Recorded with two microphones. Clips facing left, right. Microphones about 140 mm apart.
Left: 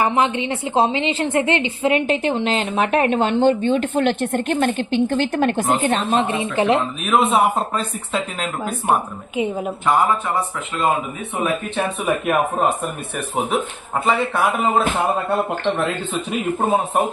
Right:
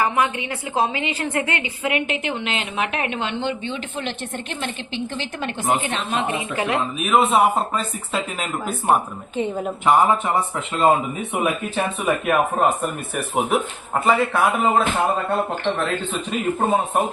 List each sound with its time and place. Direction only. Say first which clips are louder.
0.0 s a woman's voice: left 3 dB; 25° left (ahead or behind); by 5.6 s 50° left (ahead or behind)
5.8 s a woman's voice: left 6 dB; 40° left (ahead or behind)
6.7 s speech: even; centre (ahead or behind)
9.3 s a woman's voice: left 2 dB; 10° left (ahead or behind)
9.8 s speech: right 2 dB; 20° right (ahead or behind)
11.8 s speech: even; centre (ahead or behind)
16.6 s speech: left 1 dB; centre (ahead or behind)